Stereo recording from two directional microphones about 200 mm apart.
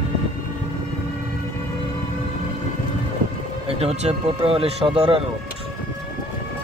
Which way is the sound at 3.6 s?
30° right (ahead or behind).